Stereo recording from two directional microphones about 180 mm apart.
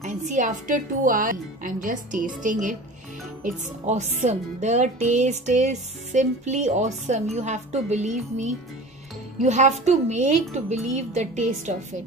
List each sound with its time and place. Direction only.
0.0 s a woman's voice: 40° right (ahead or behind)